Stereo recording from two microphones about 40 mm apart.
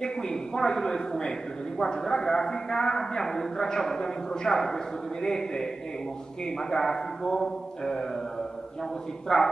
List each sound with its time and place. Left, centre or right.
0.0 s a man's voice: centre
6.8 s a man's voice: centre
9.3 s a man's voice: centre